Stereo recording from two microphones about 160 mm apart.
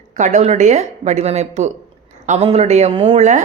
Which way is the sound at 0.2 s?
50° right (ahead or behind).